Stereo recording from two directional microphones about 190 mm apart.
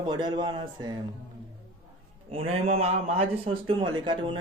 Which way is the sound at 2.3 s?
30° right (ahead or behind).